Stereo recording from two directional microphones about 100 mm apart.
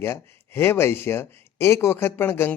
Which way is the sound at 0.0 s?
25° left (ahead or behind).